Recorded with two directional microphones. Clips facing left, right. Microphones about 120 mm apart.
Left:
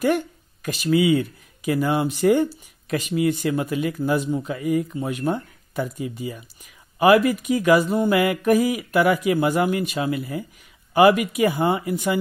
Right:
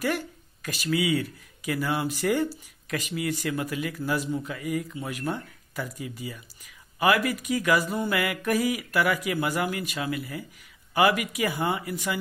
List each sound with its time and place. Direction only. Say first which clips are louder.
0.0 s speech: left 7 dB; 25° left (ahead or behind)